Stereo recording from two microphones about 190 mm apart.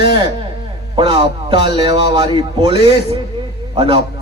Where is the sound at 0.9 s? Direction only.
25° right (ahead or behind).